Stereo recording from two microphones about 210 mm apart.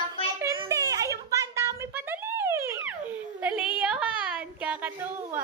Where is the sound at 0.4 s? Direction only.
15° right (ahead or behind).